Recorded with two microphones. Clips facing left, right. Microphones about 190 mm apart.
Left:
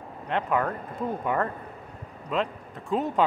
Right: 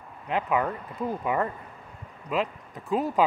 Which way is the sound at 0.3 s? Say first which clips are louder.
Even; 5° right (ahead or behind).